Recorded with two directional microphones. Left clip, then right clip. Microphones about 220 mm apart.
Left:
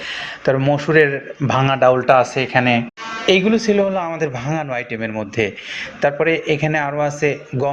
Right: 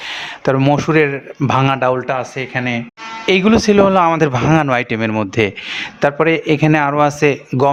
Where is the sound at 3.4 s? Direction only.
35° right (ahead or behind).